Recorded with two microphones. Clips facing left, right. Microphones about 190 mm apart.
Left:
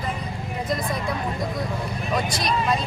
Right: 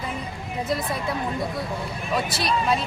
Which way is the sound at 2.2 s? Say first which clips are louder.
Right 2 dB; 5° right (ahead or behind).